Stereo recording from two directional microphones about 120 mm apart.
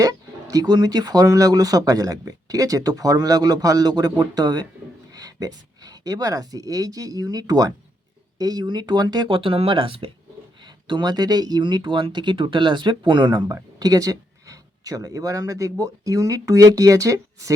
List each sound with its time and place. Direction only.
0.0 s speech: 30° right (ahead or behind)